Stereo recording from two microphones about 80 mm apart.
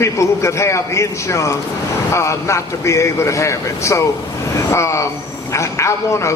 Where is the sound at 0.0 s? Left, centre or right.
Left.